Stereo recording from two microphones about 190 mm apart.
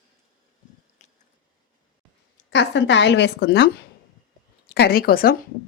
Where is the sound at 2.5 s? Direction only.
70° left (ahead or behind).